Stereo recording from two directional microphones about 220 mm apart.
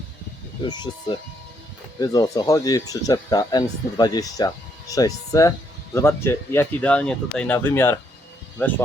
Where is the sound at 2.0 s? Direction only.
15° left (ahead or behind).